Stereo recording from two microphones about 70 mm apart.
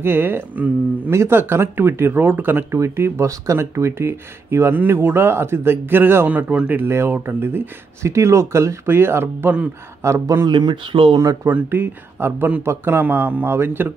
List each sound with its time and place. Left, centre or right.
0.0 s speech: right
1.1 s speech: right
2.7 s speech: right
6.3 s speech: centre
6.7 s speech: right
10.4 s speech: right
11.4 s speech: right